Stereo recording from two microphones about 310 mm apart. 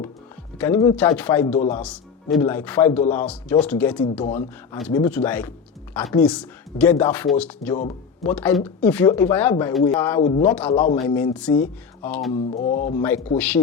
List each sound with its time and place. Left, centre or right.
0.6 s speech: centre
1.5 s speech: centre
1.8 s speech: centre
10.2 s speech: centre
11.1 s speech: centre
12.3 s a sound: centre
13.0 s speech: centre